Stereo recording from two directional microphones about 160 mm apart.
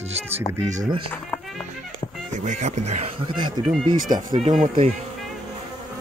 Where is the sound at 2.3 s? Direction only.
50° right (ahead or behind).